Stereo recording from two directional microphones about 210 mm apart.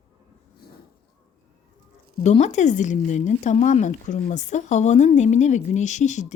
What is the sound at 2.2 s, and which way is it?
Speech, 30° left (ahead or behind).